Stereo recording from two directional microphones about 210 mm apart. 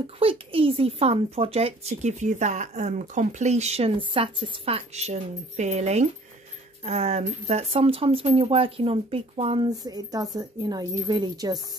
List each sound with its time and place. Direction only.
0.0 s a woman's voice: 25° right (ahead or behind)